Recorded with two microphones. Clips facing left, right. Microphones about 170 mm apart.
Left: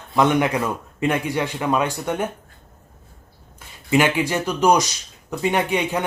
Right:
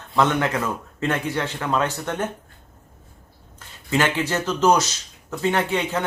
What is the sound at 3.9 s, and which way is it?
Speech, 15° left (ahead or behind).